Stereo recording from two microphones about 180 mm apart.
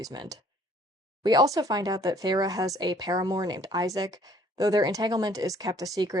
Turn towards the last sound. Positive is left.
turn(degrees=-20)  # may be behind; listen again after turning